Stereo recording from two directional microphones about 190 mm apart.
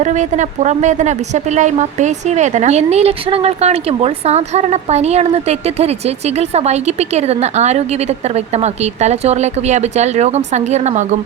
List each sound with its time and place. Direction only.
0.0 s a woman's voice: 40° right (ahead or behind)